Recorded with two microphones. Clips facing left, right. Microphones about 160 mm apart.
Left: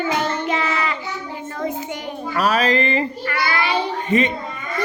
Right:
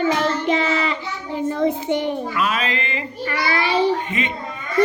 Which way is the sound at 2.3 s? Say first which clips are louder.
Left 5 dB; 40° left (ahead or behind).